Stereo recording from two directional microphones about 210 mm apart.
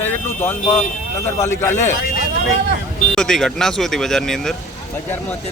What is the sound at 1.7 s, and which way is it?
Speech, 45° left (ahead or behind).